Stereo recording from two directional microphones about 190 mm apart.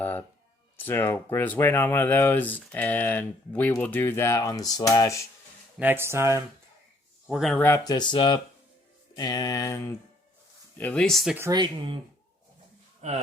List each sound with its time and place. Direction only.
0.0 s a sound: 10° left (ahead or behind)
0.8 s speech: 10° left (ahead or behind)
5.8 s speech: 10° right (ahead or behind)
7.3 s speech: centre (ahead or behind)
7.5 s speech: 10° left (ahead or behind)
11.3 s speech: 20° right (ahead or behind)
13.0 s speech: 35° right (ahead or behind)